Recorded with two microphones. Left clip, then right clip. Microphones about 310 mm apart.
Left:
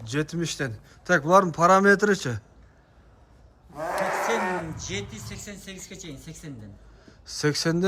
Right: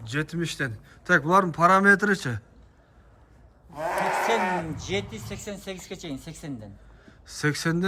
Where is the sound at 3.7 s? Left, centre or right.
Right.